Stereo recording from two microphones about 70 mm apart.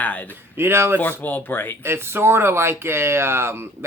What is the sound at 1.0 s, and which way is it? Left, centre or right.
Speech, left.